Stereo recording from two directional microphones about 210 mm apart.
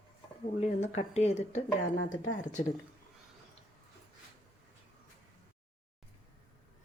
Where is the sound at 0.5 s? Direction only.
30° left (ahead or behind).